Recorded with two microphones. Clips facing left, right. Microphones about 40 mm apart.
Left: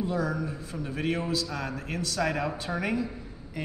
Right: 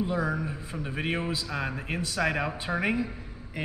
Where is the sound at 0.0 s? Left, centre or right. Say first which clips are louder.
Right 1 dB; right.